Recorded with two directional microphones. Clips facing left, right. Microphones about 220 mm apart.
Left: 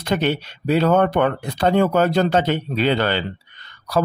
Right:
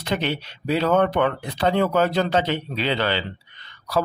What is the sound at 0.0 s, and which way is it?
Speech, 50° left (ahead or behind).